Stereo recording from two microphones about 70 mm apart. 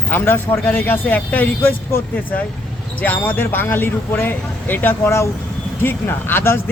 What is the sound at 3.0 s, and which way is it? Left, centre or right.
Speech, left.